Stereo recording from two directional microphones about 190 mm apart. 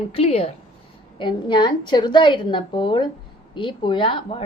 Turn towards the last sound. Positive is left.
turn(degrees=25)  # may be behind; listen again after turning